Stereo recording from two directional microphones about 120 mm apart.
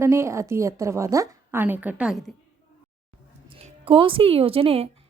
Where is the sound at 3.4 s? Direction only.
50° right (ahead or behind).